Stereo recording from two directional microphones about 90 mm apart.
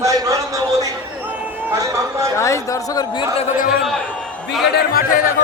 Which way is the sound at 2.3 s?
35° left (ahead or behind).